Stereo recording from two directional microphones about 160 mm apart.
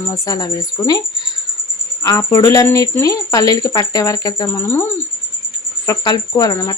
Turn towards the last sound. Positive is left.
turn(degrees=20)  # may be behind; listen again after turning